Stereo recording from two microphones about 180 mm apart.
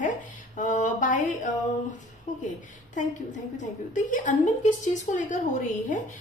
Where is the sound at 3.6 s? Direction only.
45° left (ahead or behind).